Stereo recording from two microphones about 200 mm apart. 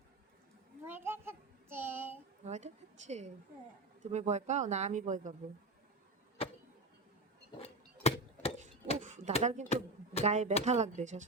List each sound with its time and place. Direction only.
0.9 s child singing: 10° right (ahead or behind)
2.4 s speech: 35° right (ahead or behind)
6.4 s a sound: 30° left (ahead or behind)
7.6 s chop: 30° left (ahead or behind)
9.0 s a sound: 40° right (ahead or behind)
9.4 s speech: 35° right (ahead or behind)